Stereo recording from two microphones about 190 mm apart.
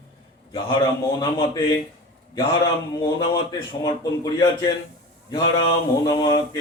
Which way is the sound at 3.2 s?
25° left (ahead or behind).